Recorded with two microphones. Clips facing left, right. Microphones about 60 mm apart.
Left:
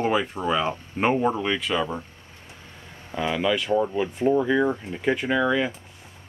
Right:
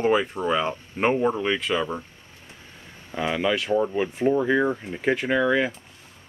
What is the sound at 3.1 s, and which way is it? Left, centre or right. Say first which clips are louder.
Speech: even; centre.